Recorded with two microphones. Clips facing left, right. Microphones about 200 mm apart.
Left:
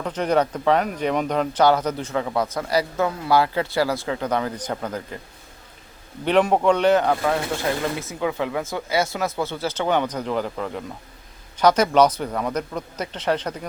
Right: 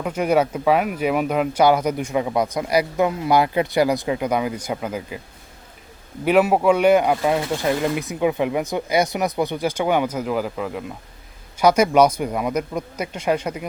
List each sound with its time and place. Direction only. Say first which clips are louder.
0.0 s speech: right 2 dB; 10° right (ahead or behind)
6.2 s speech: right 2 dB; 5° right (ahead or behind)